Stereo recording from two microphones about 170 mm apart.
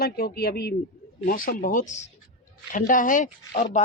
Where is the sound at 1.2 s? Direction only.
55° left (ahead or behind).